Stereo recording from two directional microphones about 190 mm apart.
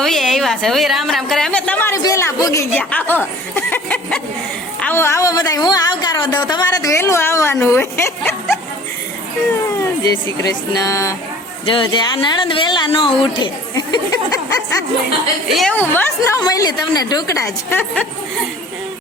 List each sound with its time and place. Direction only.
0.0 s a woman's voice: centre (ahead or behind)
9.7 s speech: 20° left (ahead or behind)
15.4 s a woman's voice: centre (ahead or behind)
15.8 s a woman's voice: 10° left (ahead or behind)